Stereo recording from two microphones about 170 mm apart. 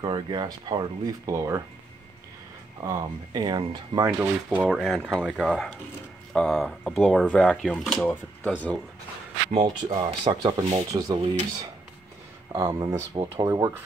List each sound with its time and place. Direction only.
0.0 s speech: 25° right (ahead or behind)
2.8 s speech: 20° right (ahead or behind)
4.2 s speech: 10° right (ahead or behind)
4.7 s speech: centre (ahead or behind)
9.5 s speech: 30° right (ahead or behind)
12.5 s speech: 20° right (ahead or behind)